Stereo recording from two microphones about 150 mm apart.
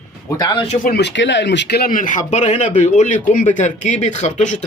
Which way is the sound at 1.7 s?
80° left.